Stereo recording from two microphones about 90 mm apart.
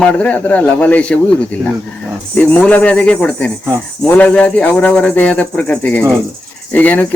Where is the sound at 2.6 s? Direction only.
15° left (ahead or behind).